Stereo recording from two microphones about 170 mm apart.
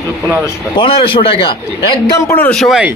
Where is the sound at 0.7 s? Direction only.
30° left (ahead or behind).